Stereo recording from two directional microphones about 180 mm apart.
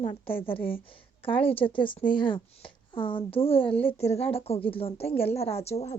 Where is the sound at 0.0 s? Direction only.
30° left (ahead or behind).